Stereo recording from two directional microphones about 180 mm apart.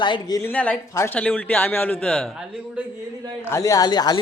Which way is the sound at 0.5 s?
10° left (ahead or behind).